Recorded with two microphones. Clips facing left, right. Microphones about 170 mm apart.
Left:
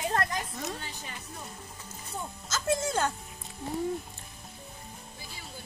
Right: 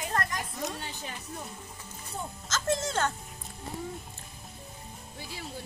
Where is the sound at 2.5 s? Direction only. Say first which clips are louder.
Left 1 dB; 10° left (ahead or behind).